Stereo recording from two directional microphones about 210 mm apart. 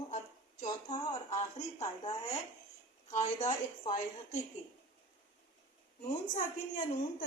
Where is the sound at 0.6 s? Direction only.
30° left (ahead or behind).